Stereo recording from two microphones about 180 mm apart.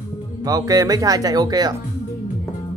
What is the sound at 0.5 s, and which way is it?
Speech, 20° right (ahead or behind).